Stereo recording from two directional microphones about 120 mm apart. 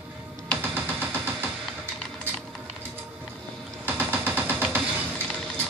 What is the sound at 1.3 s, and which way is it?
Music, 15° right (ahead or behind).